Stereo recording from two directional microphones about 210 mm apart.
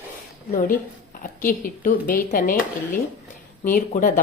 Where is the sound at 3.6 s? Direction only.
40° left (ahead or behind).